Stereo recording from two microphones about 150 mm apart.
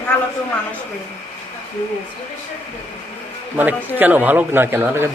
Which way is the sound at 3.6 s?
10° right (ahead or behind).